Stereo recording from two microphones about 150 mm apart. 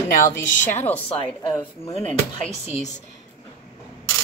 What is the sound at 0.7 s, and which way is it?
Speech, 10° left (ahead or behind).